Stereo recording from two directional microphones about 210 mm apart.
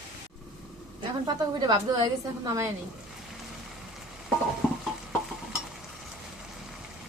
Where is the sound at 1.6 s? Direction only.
20° right (ahead or behind).